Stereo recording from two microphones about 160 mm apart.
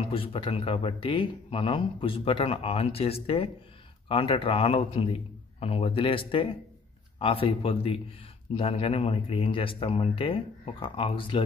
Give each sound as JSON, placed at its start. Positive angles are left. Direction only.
{"t": 0.1, "sound": "speech", "side_deg": 35}